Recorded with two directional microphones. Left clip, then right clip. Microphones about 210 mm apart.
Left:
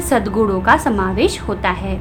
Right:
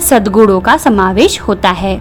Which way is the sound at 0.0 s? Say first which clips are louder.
Right 8 dB; 40° right (ahead or behind).